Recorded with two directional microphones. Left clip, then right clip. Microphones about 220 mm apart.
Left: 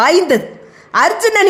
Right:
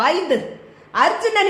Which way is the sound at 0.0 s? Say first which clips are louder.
Left 7 dB; 50° left (ahead or behind).